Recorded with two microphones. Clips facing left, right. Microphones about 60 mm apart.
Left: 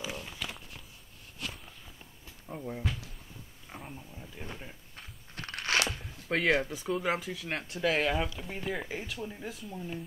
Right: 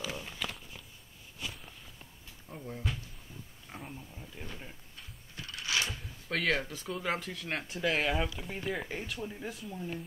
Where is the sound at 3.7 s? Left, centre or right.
Centre.